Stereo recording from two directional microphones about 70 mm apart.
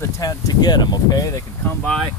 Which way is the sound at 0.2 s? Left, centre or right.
Left.